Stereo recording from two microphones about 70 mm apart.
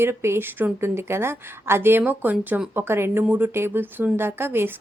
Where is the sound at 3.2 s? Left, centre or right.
Right.